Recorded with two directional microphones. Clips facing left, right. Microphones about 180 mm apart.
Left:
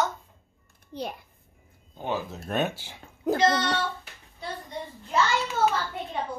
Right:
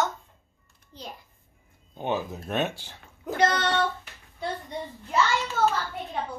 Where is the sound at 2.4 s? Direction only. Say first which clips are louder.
Left 3 dB; centre (ahead or behind).